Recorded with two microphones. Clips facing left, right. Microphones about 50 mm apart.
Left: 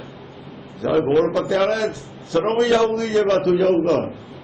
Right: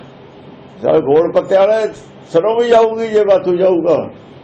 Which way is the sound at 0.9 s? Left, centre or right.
Centre.